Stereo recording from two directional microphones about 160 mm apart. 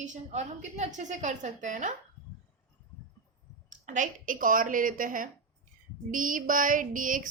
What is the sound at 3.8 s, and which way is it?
A woman's voice, 50° right (ahead or behind).